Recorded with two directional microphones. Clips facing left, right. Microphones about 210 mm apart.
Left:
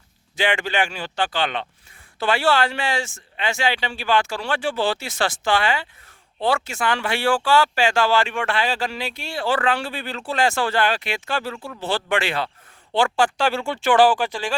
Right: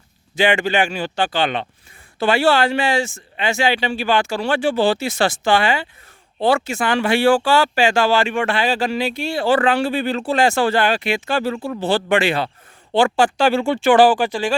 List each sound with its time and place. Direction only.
0.3 s speech: 10° right (ahead or behind)
11.6 s speech: 35° right (ahead or behind)
11.9 s speech: 10° right (ahead or behind)